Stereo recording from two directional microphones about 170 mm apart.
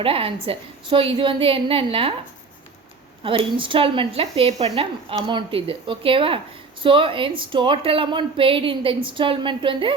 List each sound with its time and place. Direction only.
0.0 s speech: 35° right (ahead or behind)
3.2 s speech: 30° right (ahead or behind)